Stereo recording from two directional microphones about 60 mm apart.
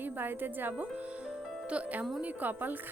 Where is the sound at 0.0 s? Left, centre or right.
Right.